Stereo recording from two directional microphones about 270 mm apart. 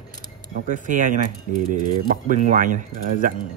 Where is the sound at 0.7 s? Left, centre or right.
Right.